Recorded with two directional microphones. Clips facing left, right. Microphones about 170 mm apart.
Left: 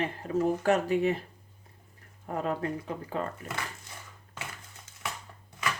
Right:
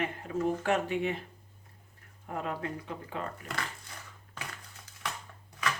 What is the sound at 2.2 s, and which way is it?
Speech, 40° left (ahead or behind).